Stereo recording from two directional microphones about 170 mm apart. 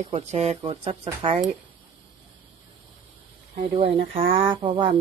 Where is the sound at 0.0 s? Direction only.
40° right (ahead or behind).